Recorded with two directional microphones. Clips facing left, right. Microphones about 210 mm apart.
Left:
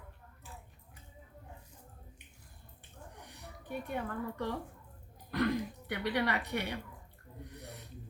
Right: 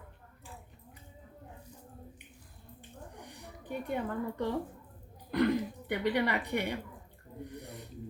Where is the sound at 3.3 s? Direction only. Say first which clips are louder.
Right 1 dB; 15° right (ahead or behind).